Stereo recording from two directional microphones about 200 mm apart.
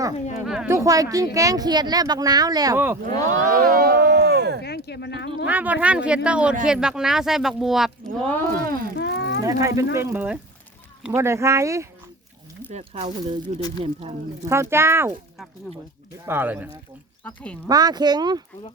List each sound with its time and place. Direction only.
0.4 s speech: 5° right (ahead or behind)
3.2 s speech: 40° right (ahead or behind); by 4.6 s 55° right (ahead or behind)
4.6 s speech: 55° left (ahead or behind)
5.5 s speech: 10° right (ahead or behind)
8.5 s speech: 45° right (ahead or behind)
9.0 s cattle: 60° left (ahead or behind)
9.4 s speech: 15° right (ahead or behind)
12.7 s speech: 35° right (ahead or behind)
14.5 s speech: 15° right (ahead or behind)
16.2 s speech: 10° right (ahead or behind)
17.2 s speech: 5° left (ahead or behind)
17.7 s speech: 20° right (ahead or behind)